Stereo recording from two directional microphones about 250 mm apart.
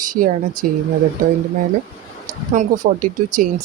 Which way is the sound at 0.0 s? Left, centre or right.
Right.